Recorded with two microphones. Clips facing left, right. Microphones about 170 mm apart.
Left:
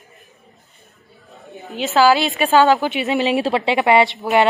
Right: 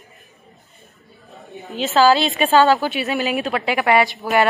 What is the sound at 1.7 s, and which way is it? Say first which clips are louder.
A woman's voice: even; 15° left (ahead or behind).